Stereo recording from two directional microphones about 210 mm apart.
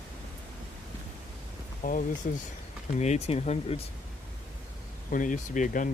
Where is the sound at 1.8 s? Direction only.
40° left (ahead or behind).